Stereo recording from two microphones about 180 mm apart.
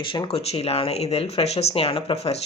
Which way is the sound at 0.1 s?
30° left (ahead or behind).